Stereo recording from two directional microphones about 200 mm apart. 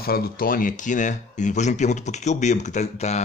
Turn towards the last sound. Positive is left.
turn(degrees=35)  # may be behind; listen again after turning